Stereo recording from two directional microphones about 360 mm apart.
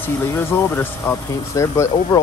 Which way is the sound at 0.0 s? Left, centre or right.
Centre.